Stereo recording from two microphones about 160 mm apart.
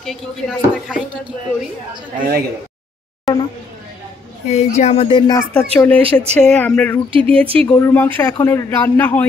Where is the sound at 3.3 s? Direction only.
Centre (ahead or behind).